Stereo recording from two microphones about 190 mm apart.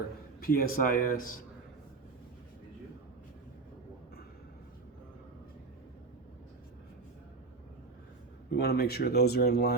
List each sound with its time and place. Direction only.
0.3 s speech: 50° left (ahead or behind)
8.4 s speech: 55° left (ahead or behind)